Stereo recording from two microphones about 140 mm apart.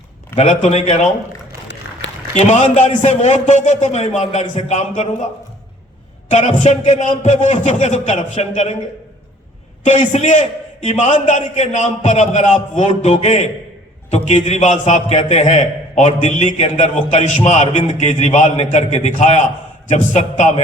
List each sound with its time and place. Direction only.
0.3 s a man's voice: 55° left (ahead or behind)
2.3 s a man's voice: 55° left (ahead or behind)
6.3 s a man's voice: 55° left (ahead or behind)
9.8 s a man's voice: 55° left (ahead or behind)